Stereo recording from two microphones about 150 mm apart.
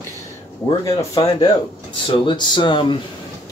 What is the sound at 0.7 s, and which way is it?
Speech, 25° left (ahead or behind).